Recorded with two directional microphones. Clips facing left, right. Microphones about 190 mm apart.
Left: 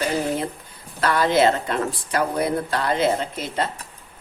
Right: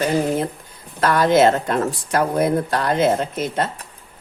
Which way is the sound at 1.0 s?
50° right (ahead or behind).